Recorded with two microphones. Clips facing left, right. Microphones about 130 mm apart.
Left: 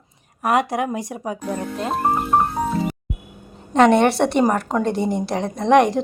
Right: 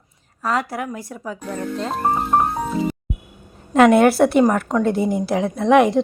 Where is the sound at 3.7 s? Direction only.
5° right (ahead or behind).